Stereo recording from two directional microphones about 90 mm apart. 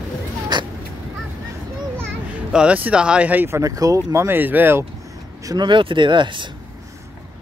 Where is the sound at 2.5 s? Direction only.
10° right (ahead or behind).